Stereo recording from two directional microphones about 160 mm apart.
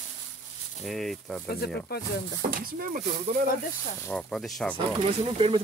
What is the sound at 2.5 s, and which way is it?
Speech, 60° right (ahead or behind).